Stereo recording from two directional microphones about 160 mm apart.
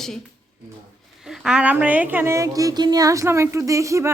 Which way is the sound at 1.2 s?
5° right (ahead or behind).